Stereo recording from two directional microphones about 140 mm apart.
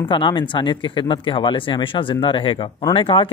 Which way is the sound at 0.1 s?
35° left (ahead or behind).